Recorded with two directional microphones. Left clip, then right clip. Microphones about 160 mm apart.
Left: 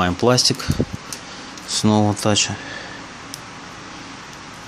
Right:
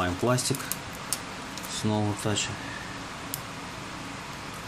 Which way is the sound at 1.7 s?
60° left (ahead or behind).